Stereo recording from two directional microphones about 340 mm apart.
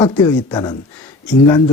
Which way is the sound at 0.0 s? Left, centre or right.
Centre.